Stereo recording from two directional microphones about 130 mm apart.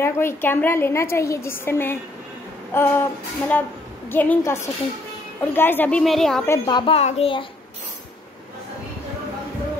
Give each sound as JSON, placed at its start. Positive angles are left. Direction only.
{"t": 0.0, "sound": "a woman's voice", "side_deg": 20}
{"t": 6.6, "sound": "speech", "side_deg": 35}
{"t": 7.0, "sound": "a child's voice", "side_deg": 50}